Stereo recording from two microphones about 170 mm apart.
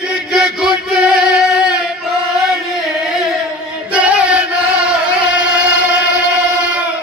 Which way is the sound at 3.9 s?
5° right (ahead or behind).